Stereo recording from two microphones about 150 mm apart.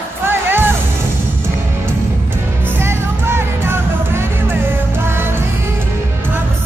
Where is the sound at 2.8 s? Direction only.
15° right (ahead or behind).